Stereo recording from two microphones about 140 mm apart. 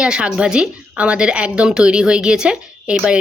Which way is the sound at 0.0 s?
5° right (ahead or behind).